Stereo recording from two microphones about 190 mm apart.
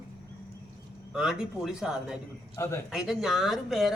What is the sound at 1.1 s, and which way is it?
Speech, 5° right (ahead or behind).